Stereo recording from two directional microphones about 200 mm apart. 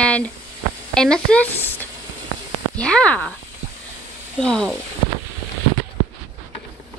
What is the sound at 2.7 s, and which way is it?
Speech, 5° left (ahead or behind).